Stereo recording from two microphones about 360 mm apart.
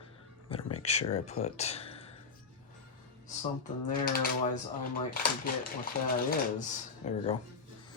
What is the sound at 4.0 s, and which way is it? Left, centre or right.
Speech, left.